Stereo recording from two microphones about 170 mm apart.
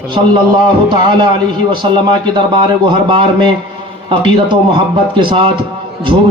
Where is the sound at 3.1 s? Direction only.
30° right (ahead or behind).